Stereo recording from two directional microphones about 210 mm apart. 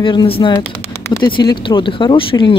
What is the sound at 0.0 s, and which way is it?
Speech, 25° left (ahead or behind).